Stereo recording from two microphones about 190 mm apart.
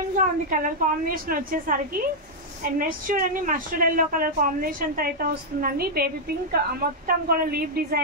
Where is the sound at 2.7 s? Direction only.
50° right (ahead or behind).